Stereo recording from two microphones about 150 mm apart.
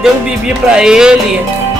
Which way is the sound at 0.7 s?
5° right (ahead or behind).